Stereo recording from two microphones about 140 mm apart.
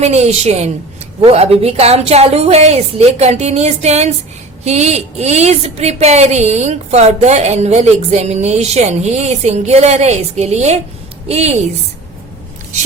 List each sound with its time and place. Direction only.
0.0 s a woman's voice: 50° right (ahead or behind)